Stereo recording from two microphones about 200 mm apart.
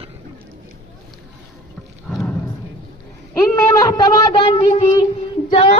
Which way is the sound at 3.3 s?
15° left (ahead or behind).